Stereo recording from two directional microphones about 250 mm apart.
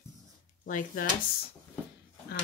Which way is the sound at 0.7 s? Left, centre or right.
Left.